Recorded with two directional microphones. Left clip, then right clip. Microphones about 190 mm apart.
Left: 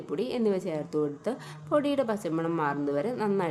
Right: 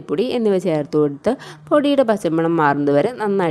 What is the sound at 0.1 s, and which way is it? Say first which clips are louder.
A woman's voice: right 11 dB; 40° right (ahead or behind).